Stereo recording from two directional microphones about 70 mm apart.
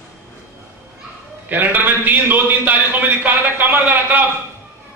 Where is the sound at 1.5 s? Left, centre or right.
Right.